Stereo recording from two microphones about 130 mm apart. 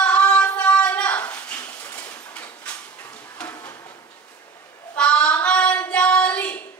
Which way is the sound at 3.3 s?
10° left (ahead or behind).